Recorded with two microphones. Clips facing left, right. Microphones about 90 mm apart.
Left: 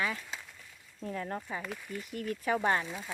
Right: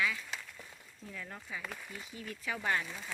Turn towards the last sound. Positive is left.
turn(degrees=20)  # may be behind; listen again after turning